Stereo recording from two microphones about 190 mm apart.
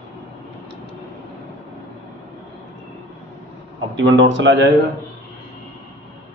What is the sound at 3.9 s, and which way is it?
Speech, 70° right (ahead or behind).